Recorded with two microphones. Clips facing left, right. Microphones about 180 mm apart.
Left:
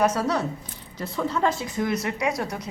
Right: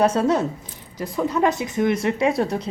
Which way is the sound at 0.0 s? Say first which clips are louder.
Right 4 dB; 30° right (ahead or behind).